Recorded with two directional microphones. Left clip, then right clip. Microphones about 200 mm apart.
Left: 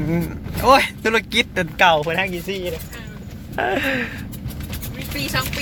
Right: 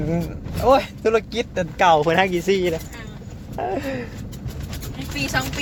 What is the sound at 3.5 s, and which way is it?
Speech, 5° left (ahead or behind).